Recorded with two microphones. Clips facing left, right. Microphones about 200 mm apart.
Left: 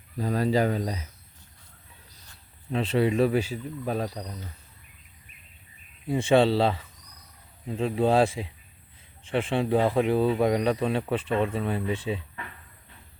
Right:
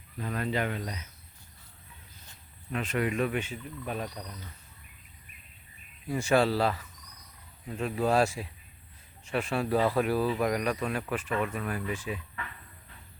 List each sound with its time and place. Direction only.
0.2 s speech: 35° left (ahead or behind)
2.7 s speech: 30° left (ahead or behind)
6.1 s speech: 30° left (ahead or behind)